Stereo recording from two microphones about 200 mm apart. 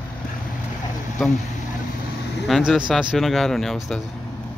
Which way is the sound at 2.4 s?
Centre (ahead or behind).